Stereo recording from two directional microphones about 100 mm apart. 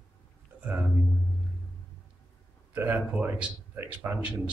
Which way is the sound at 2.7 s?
20° right (ahead or behind).